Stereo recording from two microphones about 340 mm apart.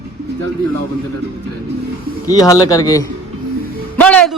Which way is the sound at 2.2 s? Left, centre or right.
Centre.